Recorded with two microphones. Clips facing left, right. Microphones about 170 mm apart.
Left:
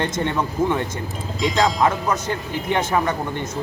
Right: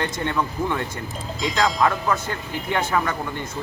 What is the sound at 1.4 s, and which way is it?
Speech, centre (ahead or behind).